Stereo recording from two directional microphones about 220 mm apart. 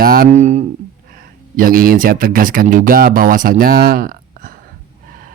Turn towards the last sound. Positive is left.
turn(degrees=-40)  # may be behind; listen again after turning